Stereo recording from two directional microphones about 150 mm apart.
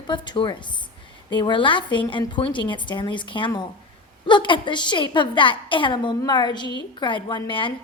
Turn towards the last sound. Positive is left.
turn(degrees=35)  # may be behind; listen again after turning